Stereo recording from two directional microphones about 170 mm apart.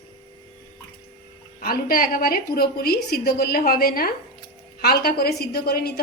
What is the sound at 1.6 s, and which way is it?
A woman's voice, 60° left (ahead or behind).